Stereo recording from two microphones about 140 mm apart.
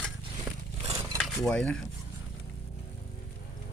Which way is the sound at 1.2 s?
5° left (ahead or behind).